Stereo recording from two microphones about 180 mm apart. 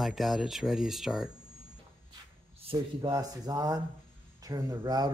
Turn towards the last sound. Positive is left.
turn(degrees=-20)  # may be behind; listen again after turning